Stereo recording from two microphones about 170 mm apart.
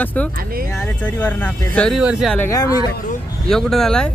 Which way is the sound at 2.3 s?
15° left (ahead or behind).